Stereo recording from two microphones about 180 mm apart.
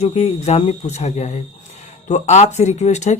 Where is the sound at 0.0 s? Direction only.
35° left (ahead or behind).